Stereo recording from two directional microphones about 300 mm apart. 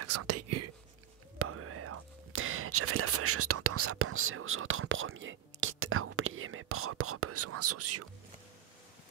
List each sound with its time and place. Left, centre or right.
0.0 s whispering: right